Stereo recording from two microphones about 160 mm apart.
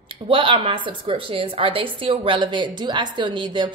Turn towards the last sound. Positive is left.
turn(degrees=-30)  # may be behind; listen again after turning